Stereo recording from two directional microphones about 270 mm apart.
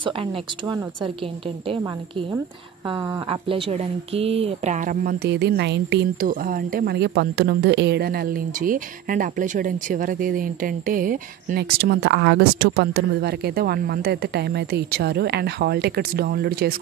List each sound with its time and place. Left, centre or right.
0.0 s speech: centre
2.9 s speech: centre; by 16.7 s right